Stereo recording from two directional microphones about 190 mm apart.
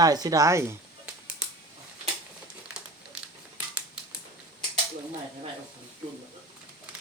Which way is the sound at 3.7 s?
5° right (ahead or behind).